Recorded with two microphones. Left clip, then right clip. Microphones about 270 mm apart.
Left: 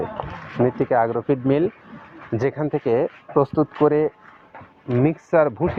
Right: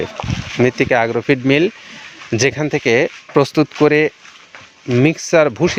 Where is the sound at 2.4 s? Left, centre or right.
Right.